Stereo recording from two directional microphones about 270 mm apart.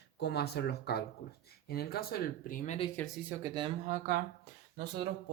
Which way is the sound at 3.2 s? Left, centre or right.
Centre.